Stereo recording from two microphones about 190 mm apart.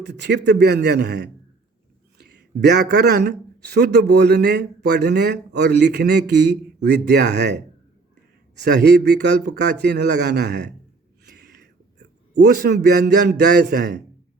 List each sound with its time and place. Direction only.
0.0 s a man's voice: 60° right (ahead or behind)
11.3 s a sound: 60° right (ahead or behind)
12.5 s a man's voice: 60° right (ahead or behind)